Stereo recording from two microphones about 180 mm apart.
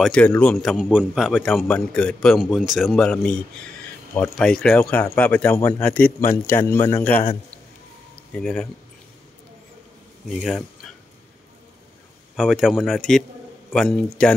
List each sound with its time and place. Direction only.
0.0 s a man's voice: 5° left (ahead or behind)
8.4 s a man's voice: 5° left (ahead or behind)
10.4 s speech: 5° left (ahead or behind)
12.4 s a man's voice: centre (ahead or behind)